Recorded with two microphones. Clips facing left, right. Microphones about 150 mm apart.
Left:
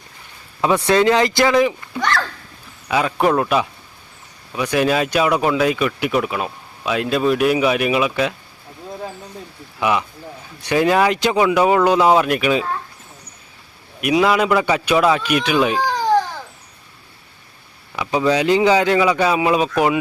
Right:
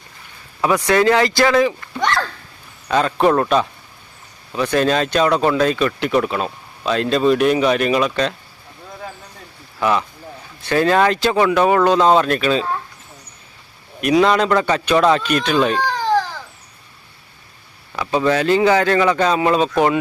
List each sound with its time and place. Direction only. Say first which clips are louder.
0.6 s speech: even; 25° left (ahead or behind)
2.0 s a sound: right 1 dB; 20° right (ahead or behind)
2.9 s speech: right 2 dB; 10° left (ahead or behind)
10.6 s speech: even; 15° left (ahead or behind)
14.0 s speech: right 1 dB; 5° left (ahead or behind)
17.9 s speech: even; 15° left (ahead or behind)